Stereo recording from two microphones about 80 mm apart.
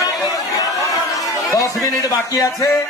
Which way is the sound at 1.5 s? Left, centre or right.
Left.